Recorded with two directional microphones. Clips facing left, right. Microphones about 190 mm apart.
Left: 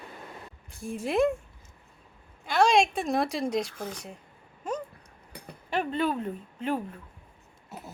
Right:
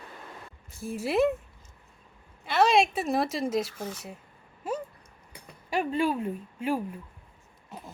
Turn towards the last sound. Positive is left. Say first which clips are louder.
# right 1 dB
turn(degrees=-10)  # may be behind; listen again after turning